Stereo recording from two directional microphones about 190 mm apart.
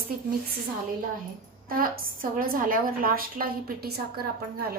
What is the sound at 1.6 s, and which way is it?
A woman's voice, 50° right (ahead or behind).